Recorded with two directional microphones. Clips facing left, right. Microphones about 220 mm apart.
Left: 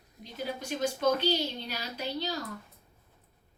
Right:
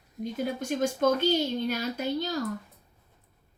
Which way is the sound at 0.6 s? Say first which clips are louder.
Right 4 dB; 50° right (ahead or behind).